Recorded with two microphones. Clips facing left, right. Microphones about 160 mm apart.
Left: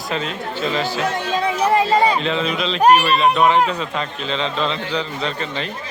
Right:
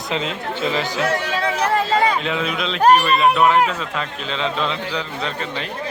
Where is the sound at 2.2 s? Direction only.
10° right (ahead or behind).